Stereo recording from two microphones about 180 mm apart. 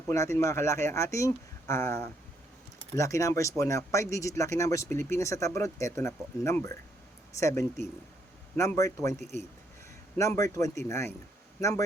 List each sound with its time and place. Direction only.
0.1 s speech: 15° left (ahead or behind)
10.2 s speech: 15° left (ahead or behind)